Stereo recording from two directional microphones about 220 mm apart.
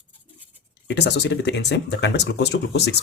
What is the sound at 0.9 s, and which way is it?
Speech, 50° left (ahead or behind).